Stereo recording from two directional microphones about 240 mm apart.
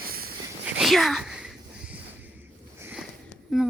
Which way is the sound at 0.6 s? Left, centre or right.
Centre.